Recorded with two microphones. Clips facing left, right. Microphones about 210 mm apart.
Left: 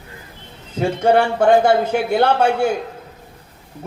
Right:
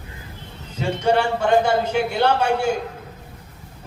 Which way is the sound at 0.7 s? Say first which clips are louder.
Left 4 dB; 50° left (ahead or behind).